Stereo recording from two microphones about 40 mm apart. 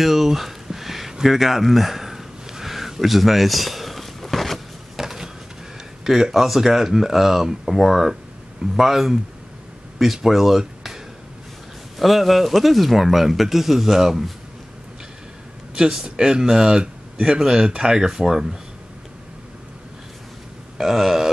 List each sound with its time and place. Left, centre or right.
0.0 s a sound: centre
4.9 s a sound: centre
6.0 s speech: centre
12.0 s speech: centre
15.7 s speech: centre
20.7 s speech: centre